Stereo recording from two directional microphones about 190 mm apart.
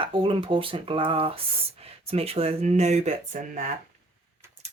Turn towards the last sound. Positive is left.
turn(degrees=-40)  # may be behind; listen again after turning